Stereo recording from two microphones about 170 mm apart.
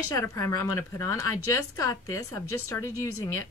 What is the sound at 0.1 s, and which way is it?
Speech, 20° left (ahead or behind).